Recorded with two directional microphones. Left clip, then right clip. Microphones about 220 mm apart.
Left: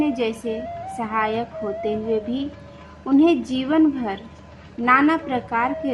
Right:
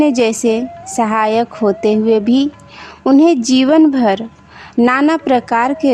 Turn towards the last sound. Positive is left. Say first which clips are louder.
# right 9 dB
turn(degrees=-55)  # may be behind; listen again after turning